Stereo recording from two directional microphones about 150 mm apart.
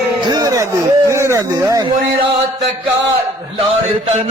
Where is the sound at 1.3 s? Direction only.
20° right (ahead or behind).